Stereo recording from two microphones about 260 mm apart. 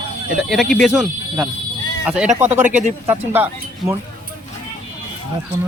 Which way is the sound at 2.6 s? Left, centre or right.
Right.